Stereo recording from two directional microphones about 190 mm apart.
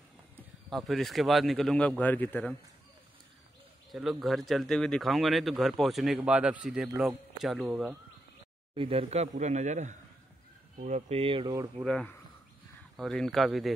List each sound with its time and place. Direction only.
0.7 s speech: centre (ahead or behind)
3.9 s speech: centre (ahead or behind)
8.7 s a man's voice: 30° right (ahead or behind)
11.8 s speech: 5° left (ahead or behind)